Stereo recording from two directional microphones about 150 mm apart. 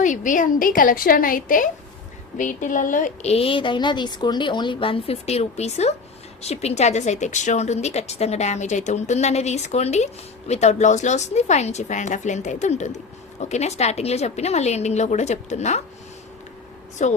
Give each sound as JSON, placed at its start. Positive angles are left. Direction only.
{"t": 0.0, "sound": "a woman's voice", "side_deg": 60}
{"t": 3.2, "sound": "a woman's voice", "side_deg": 40}
{"t": 17.0, "sound": "a woman's voice", "side_deg": 55}